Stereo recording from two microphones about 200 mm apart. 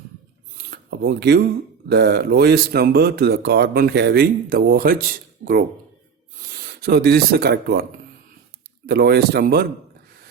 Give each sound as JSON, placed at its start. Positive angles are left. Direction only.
{"t": 0.5, "sound": "a sound", "side_deg": -50}
{"t": 1.9, "sound": "speech", "side_deg": -55}
{"t": 6.7, "sound": "speech", "side_deg": -50}
{"t": 8.9, "sound": "speech", "side_deg": -50}